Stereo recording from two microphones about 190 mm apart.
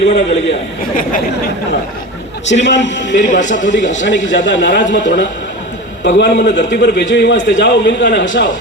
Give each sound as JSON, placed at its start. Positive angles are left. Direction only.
{"t": 0.0, "sound": "a man's voice", "side_deg": 65}
{"t": 2.5, "sound": "a man's voice", "side_deg": 70}
{"t": 3.2, "sound": "speech", "side_deg": 40}
{"t": 4.0, "sound": "a man's voice", "side_deg": 70}